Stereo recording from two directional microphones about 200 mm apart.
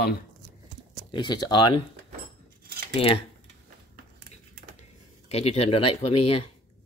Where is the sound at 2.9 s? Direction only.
30° left (ahead or behind).